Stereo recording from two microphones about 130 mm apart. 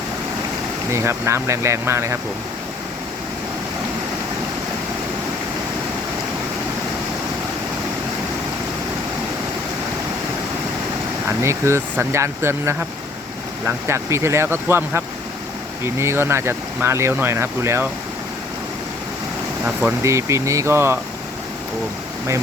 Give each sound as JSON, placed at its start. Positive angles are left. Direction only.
{"t": 0.9, "sound": "speech", "side_deg": -20}
{"t": 11.3, "sound": "speech", "side_deg": -20}
{"t": 20.0, "sound": "speech", "side_deg": -25}